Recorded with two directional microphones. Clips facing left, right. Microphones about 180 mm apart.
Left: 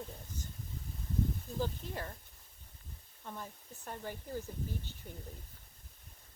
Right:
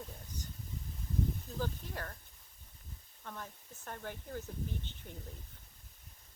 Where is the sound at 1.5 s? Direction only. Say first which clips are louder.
Left 4 dB; 15° left (ahead or behind).